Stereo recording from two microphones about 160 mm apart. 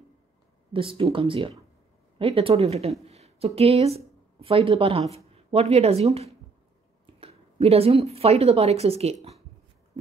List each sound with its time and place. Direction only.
0.7 s a woman's voice: 35° right (ahead or behind)